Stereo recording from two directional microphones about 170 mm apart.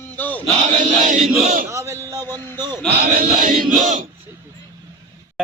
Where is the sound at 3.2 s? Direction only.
55° right (ahead or behind).